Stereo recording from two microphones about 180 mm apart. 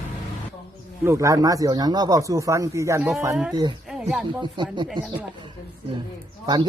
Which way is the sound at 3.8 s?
5° right (ahead or behind).